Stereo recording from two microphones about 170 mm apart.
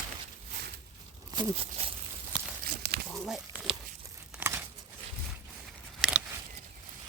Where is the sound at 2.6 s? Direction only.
65° right (ahead or behind).